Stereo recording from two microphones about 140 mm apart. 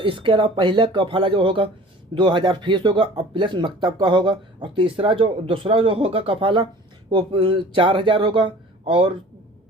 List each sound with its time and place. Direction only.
0.0 s speech: 35° right (ahead or behind)